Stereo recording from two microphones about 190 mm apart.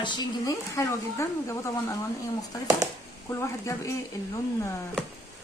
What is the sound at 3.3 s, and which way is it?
Speech, 15° left (ahead or behind).